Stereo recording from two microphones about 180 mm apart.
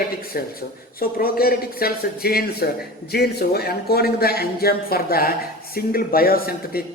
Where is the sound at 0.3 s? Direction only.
55° left (ahead or behind).